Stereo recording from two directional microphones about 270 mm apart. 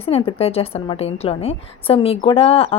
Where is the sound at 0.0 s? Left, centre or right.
Centre.